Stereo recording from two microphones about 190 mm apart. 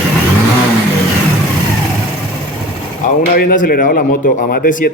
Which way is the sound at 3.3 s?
50° left (ahead or behind).